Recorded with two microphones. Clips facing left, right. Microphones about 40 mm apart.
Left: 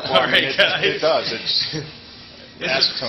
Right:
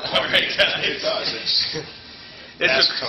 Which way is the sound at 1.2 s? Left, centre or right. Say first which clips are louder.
Left 1 dB; left.